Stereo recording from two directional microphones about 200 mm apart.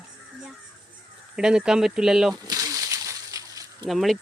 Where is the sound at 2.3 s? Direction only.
20° right (ahead or behind).